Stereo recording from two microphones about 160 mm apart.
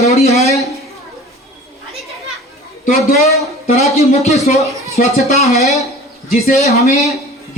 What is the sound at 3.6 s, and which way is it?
Speech, 40° left (ahead or behind).